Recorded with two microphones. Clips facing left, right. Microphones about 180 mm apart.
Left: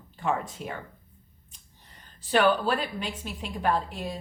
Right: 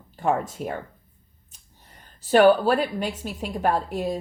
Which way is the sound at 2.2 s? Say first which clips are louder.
Right 7 dB; 40° right (ahead or behind).